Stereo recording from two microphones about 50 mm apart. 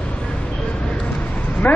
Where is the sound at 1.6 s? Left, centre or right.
Left.